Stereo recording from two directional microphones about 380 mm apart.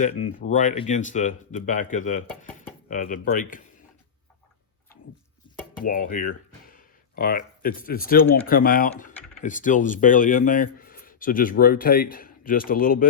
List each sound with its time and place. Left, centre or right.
0.0 s speech: centre
5.7 s speech: left